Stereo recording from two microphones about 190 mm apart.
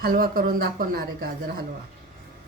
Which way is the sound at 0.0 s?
50° right (ahead or behind).